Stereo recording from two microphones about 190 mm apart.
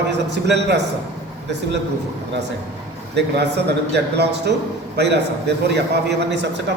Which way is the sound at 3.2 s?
60° right (ahead or behind).